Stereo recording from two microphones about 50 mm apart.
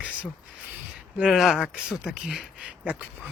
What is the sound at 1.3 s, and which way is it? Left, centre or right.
Speech, centre.